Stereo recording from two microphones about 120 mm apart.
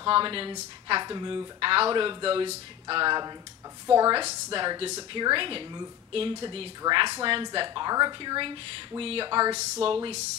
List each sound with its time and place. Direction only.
0.0 s speech: 45° right (ahead or behind)
1.6 s speech: 50° right (ahead or behind)
2.9 s speech: 40° right (ahead or behind)
3.8 s a woman's voice: 25° right (ahead or behind)
4.5 s speech: 45° right (ahead or behind)
9.3 s speech: 35° right (ahead or behind)
9.6 s speech: 50° right (ahead or behind)